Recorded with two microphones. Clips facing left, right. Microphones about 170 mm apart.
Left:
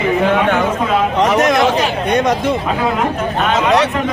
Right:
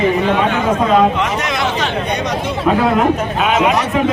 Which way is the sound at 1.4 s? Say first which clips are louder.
Left 6 dB; 45° left (ahead or behind).